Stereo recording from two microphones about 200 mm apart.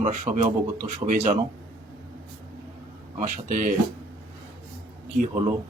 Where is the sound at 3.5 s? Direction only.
40° right (ahead or behind).